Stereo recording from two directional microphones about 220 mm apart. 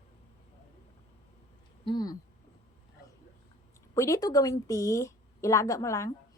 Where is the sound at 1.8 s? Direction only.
20° left (ahead or behind).